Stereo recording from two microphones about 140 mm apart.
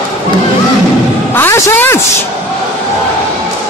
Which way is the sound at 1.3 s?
20° left (ahead or behind).